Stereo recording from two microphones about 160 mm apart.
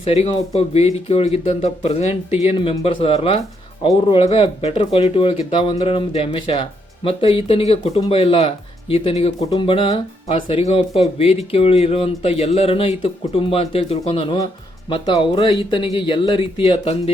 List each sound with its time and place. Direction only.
0.0 s speech: 40° left (ahead or behind)